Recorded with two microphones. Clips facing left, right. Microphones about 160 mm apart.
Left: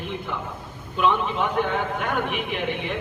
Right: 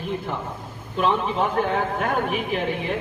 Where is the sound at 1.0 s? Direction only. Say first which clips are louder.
Right 1 dB; 35° right (ahead or behind).